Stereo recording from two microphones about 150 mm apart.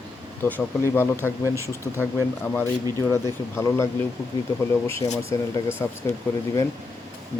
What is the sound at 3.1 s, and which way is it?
Speech, 20° left (ahead or behind).